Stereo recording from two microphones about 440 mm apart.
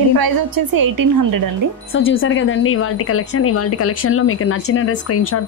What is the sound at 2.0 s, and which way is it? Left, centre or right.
A woman's voice, left.